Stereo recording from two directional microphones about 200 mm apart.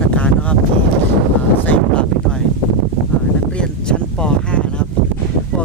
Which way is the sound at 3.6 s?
5° left (ahead or behind).